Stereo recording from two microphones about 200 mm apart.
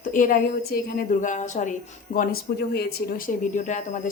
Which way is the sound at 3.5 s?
40° left (ahead or behind).